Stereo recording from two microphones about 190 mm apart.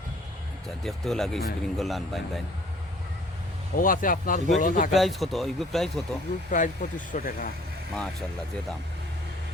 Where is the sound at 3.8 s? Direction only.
45° left (ahead or behind).